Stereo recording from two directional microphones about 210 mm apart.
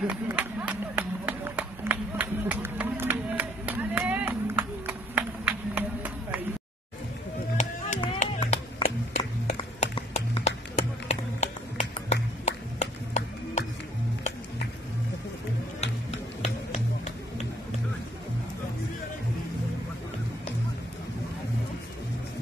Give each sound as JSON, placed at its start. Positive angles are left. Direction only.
{"t": 0.0, "sound": "run", "side_deg": -5}
{"t": 7.5, "sound": "music", "side_deg": 30}
{"t": 15.8, "sound": "music", "side_deg": 30}